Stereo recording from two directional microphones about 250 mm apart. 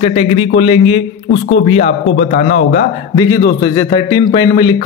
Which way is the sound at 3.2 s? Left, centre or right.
Centre.